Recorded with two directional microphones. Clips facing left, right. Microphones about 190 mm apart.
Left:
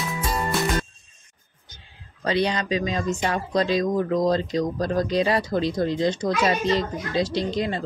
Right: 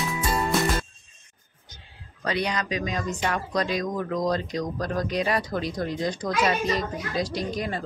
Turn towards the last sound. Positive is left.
turn(degrees=25)  # may be behind; listen again after turning